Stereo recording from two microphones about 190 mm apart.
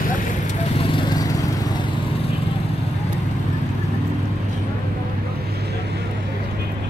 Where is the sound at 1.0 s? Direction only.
20° left (ahead or behind).